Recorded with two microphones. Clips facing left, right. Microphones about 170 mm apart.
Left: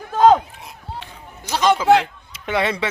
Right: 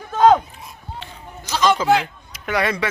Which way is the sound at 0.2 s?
5° left (ahead or behind).